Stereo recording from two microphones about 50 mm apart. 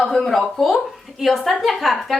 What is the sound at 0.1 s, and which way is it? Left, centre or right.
A woman's voice, centre.